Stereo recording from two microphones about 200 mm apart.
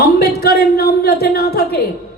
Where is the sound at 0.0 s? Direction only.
50° left (ahead or behind).